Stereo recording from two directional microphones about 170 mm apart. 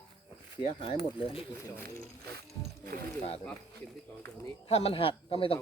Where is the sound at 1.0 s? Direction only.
35° left (ahead or behind).